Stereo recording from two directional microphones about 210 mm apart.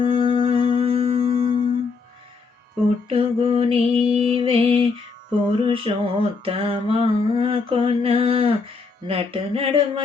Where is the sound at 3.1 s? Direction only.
25° right (ahead or behind).